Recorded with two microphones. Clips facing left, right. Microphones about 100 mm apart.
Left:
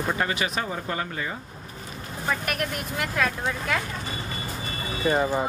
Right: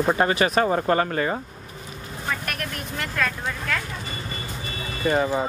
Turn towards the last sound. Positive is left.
turn(degrees=5)  # may be behind; listen again after turning